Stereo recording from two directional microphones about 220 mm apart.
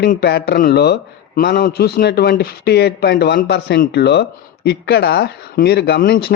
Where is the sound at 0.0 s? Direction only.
45° left (ahead or behind).